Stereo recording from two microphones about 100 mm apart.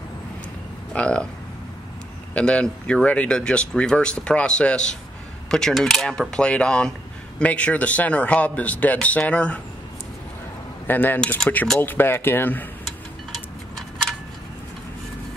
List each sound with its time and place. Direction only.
0.9 s a sound: 10° left (ahead or behind)
2.3 s speech: 10° left (ahead or behind)
10.9 s speech: 20° left (ahead or behind)